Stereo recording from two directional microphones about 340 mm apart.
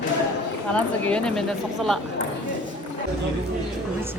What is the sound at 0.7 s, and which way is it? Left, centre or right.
Speech, centre.